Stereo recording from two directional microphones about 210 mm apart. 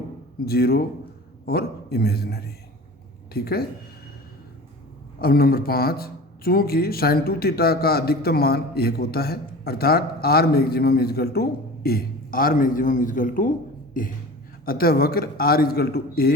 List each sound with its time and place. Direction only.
0.4 s a man's voice: 45° left (ahead or behind)
5.2 s a man's voice: 45° left (ahead or behind)
14.0 s beatboxing: 40° left (ahead or behind)
14.6 s a man's voice: 45° left (ahead or behind)